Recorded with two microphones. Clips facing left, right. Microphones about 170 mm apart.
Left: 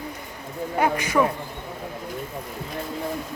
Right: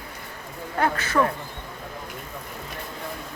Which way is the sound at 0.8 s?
15° left (ahead or behind).